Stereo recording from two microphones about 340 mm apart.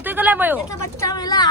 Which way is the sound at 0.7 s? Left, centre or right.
Centre.